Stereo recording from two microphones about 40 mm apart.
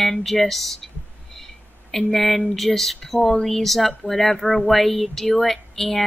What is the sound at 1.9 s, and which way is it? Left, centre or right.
Speech, centre.